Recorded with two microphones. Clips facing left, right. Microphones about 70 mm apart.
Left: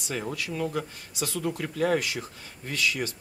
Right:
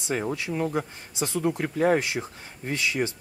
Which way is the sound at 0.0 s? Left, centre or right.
Right.